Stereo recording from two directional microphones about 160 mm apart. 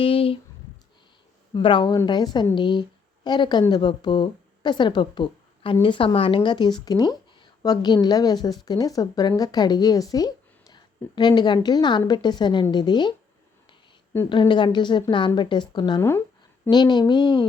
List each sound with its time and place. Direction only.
0.0 s speech: 35° left (ahead or behind)
1.5 s a woman's voice: 30° left (ahead or behind)
14.3 s speech: 30° left (ahead or behind)
16.6 s speech: 25° left (ahead or behind)